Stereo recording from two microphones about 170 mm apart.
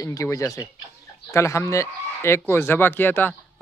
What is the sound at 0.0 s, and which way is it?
Speech, 20° left (ahead or behind).